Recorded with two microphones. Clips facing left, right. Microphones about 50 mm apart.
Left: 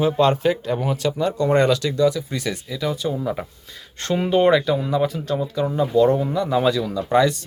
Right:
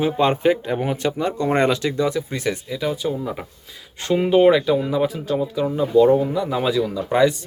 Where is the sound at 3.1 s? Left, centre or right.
Centre.